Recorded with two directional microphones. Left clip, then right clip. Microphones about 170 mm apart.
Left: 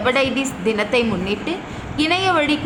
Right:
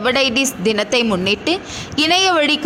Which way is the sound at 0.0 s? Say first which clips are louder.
Right 3 dB; 35° right (ahead or behind).